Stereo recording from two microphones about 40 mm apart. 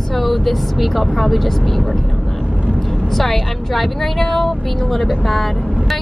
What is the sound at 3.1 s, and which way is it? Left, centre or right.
A woman's voice, centre.